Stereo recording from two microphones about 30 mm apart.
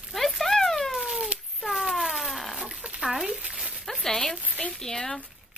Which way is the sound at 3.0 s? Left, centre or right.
Centre.